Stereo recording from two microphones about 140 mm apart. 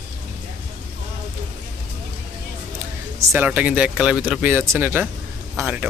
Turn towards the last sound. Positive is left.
turn(degrees=-10)  # may be behind; listen again after turning